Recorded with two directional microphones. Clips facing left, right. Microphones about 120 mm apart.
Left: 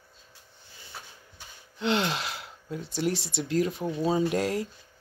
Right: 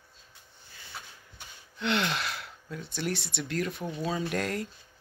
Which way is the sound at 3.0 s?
20° left (ahead or behind).